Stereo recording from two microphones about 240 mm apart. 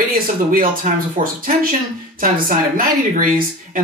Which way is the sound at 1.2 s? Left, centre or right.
Right.